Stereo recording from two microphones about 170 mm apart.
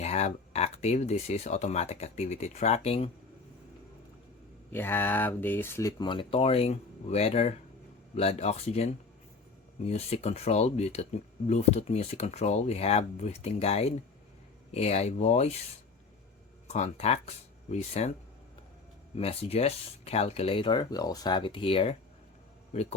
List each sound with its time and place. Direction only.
0.0 s speech: 40° left (ahead or behind)
4.7 s speech: 10° left (ahead or behind); by 15.5 s 40° left (ahead or behind)
16.7 s speech: 40° left (ahead or behind)
19.1 s a man's voice: 35° left (ahead or behind)